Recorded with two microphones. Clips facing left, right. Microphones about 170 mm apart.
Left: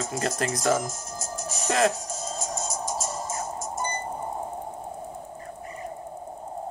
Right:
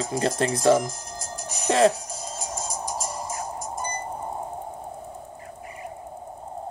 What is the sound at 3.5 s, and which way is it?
Music, 25° left (ahead or behind).